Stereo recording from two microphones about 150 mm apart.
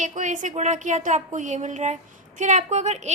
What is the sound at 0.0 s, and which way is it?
A woman's voice, 55° right (ahead or behind).